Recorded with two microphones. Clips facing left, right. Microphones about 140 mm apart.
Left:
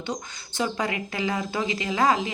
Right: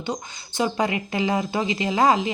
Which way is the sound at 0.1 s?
15° right (ahead or behind).